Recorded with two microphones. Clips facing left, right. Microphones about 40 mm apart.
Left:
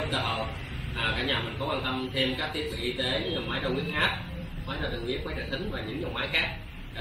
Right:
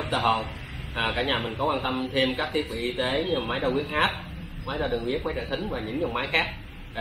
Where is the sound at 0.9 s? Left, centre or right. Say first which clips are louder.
Right 3 dB; right.